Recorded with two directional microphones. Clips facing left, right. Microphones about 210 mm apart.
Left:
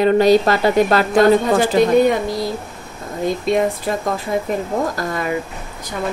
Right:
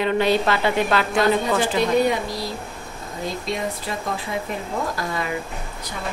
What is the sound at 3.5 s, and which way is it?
Speech, 55° left (ahead or behind).